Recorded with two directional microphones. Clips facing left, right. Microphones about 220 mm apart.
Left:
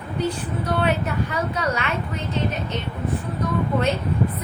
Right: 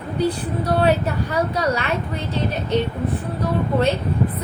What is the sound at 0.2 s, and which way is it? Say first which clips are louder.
A woman's voice: right 3 dB; 35° right (ahead or behind).